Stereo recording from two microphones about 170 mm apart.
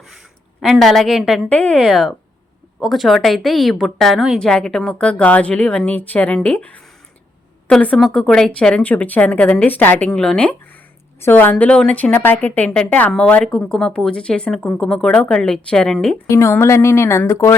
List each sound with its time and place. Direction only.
0.6 s a woman's voice: centre (ahead or behind)
16.3 s a woman's voice: 15° left (ahead or behind)